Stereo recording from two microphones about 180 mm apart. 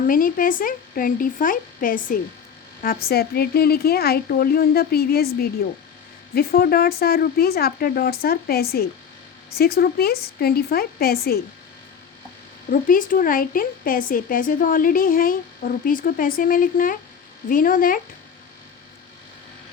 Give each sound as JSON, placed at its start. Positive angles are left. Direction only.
{"t": 0.1, "sound": "speech", "side_deg": 50}
{"t": 12.7, "sound": "speech", "side_deg": 50}